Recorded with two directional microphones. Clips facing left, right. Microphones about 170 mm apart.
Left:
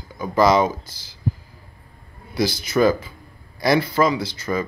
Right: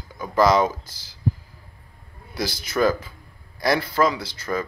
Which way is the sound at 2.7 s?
5° left (ahead or behind).